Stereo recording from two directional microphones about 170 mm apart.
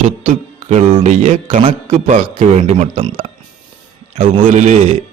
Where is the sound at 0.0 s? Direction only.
45° right (ahead or behind).